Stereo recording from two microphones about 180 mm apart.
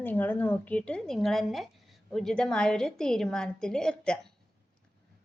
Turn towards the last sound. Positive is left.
turn(degrees=5)  # may be behind; listen again after turning